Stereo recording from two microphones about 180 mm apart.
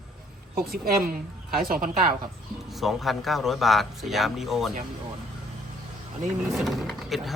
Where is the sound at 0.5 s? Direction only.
55° right (ahead or behind).